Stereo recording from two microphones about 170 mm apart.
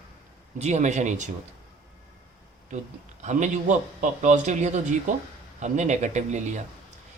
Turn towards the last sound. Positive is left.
turn(degrees=-45)  # may be behind; listen again after turning